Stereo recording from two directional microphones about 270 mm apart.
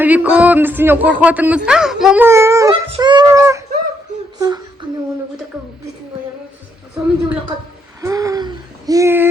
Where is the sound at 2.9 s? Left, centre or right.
Centre.